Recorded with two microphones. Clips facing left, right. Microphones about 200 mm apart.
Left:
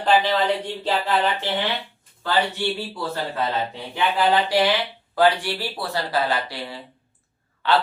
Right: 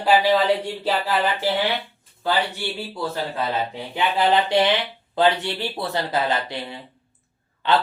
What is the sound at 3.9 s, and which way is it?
A man's voice, 20° right (ahead or behind).